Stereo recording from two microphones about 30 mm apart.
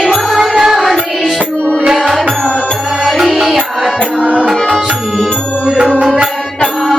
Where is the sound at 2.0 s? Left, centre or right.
Centre.